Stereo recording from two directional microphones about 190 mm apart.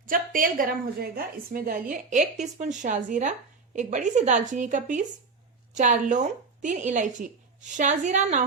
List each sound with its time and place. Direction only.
0.0 s a woman's voice: 45° right (ahead or behind)